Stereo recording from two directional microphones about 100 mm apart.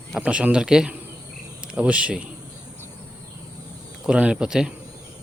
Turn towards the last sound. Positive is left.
turn(degrees=-5)  # may be behind; listen again after turning